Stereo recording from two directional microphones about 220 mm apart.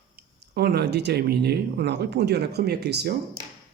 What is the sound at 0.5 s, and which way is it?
Speech, 45° right (ahead or behind).